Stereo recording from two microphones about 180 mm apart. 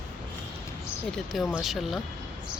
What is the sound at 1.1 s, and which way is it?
Speech, centre (ahead or behind).